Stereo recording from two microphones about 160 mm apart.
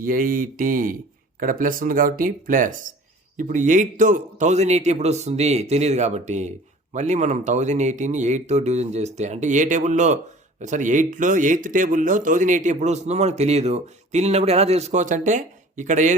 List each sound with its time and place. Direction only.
0.0 s speech: 60° right (ahead or behind)